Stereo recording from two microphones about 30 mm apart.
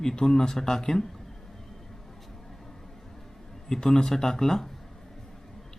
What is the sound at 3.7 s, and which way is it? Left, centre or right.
Speech, centre.